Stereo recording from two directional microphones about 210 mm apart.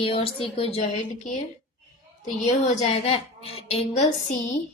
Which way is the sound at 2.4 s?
35° left (ahead or behind).